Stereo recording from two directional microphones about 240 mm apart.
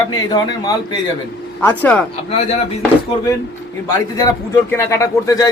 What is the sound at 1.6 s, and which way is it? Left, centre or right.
Speech, centre.